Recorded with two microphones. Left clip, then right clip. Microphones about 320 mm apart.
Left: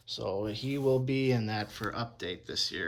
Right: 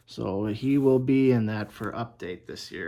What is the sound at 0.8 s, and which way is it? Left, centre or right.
Speech, right.